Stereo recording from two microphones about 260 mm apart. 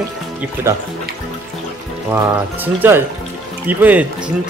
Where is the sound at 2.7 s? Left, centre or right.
Centre.